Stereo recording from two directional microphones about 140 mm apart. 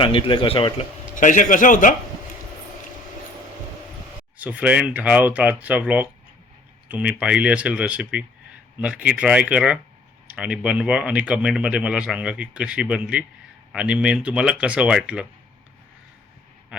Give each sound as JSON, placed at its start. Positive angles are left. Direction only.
{"t": 0.0, "sound": "a man's voice", "side_deg": 40}
{"t": 1.1, "sound": "a man's voice", "side_deg": 65}
{"t": 4.4, "sound": "speech", "side_deg": -10}